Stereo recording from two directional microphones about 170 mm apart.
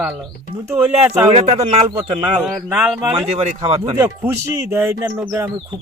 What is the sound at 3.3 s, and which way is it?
Speech, 40° right (ahead or behind).